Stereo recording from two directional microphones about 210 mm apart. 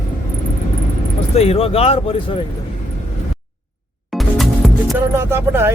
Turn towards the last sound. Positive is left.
turn(degrees=-10)  # may be behind; listen again after turning